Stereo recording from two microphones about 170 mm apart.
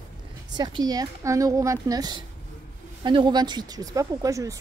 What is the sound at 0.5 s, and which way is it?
A woman's voice, 25° right (ahead or behind).